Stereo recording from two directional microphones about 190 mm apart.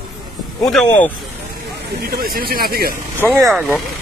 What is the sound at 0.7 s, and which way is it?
Speech, 5° left (ahead or behind).